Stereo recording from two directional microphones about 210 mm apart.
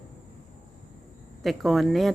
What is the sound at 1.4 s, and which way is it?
Speech, centre (ahead or behind).